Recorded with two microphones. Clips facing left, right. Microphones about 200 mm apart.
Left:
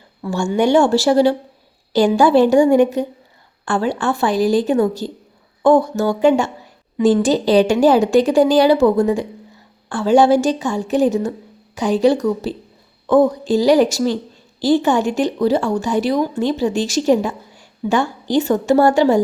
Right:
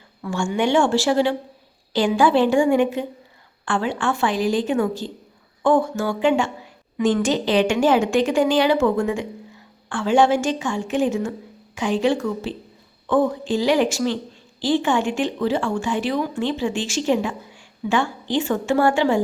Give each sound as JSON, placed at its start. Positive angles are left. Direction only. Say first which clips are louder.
{"t": 0.3, "sound": "a woman's voice", "louder": "left 5 dB", "side_deg": 40}